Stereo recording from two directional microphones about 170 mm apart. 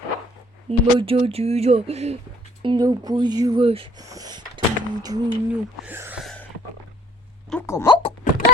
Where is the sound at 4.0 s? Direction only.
20° right (ahead or behind).